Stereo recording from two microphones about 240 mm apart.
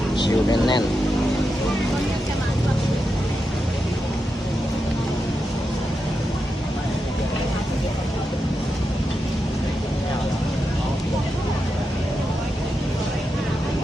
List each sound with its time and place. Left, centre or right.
0.2 s speech: centre